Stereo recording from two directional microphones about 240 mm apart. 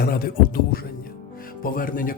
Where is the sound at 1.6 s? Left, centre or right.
Left.